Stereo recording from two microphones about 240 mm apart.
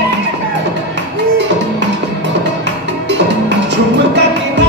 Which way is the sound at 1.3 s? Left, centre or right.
Right.